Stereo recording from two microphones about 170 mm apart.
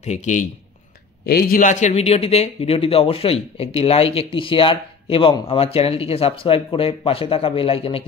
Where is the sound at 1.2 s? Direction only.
60° left (ahead or behind).